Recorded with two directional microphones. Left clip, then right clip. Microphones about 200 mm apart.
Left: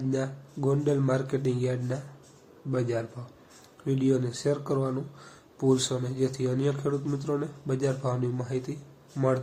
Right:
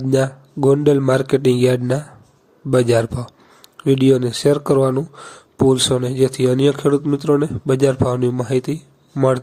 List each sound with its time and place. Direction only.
0.1 s speech: 50° right (ahead or behind)